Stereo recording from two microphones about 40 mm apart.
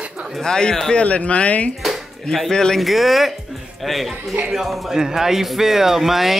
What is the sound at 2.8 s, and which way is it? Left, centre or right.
A woman's voice, centre.